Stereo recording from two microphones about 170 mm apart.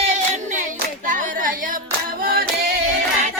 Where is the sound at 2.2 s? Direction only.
60° right (ahead or behind).